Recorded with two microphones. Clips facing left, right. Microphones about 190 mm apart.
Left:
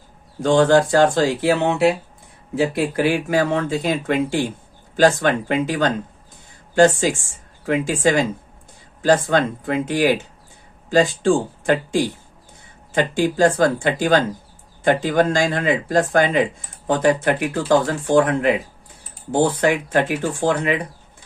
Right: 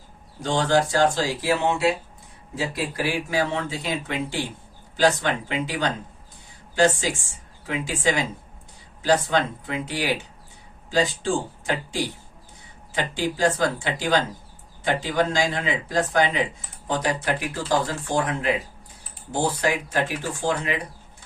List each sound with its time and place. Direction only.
0.4 s speech: 55° left (ahead or behind)